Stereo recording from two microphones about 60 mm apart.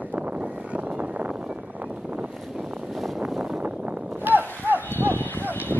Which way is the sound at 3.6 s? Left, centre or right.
Right.